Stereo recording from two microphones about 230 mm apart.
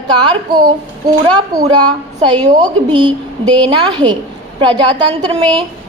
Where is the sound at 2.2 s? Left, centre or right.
Centre.